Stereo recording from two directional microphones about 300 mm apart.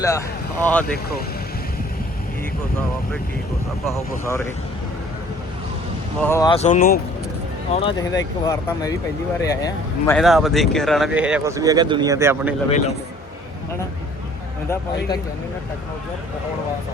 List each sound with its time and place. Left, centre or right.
0.0 s speech: centre
3.8 s speech: centre
6.1 s speech: centre; by 7.0 s left
7.7 s speech: centre